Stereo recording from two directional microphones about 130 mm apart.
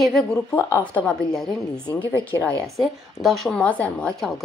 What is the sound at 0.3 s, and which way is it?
A woman's voice, 15° left (ahead or behind).